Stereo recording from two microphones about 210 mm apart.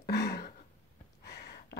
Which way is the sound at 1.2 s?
50° left (ahead or behind).